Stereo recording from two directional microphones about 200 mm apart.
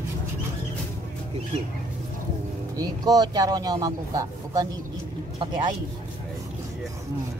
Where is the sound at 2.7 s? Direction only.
20° right (ahead or behind).